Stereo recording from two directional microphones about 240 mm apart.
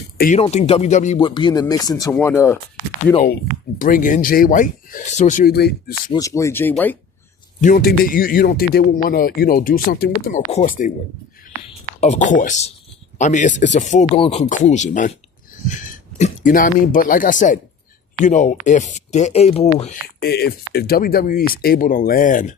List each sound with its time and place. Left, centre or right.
0.2 s speech: left; by 2.6 s centre
3.8 s a man's voice: left
6.1 s speech: centre
7.6 s a man's voice: left
11.9 s a man's voice: left
20.2 s a man's voice: left